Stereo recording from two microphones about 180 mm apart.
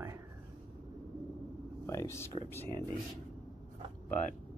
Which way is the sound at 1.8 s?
15° left (ahead or behind).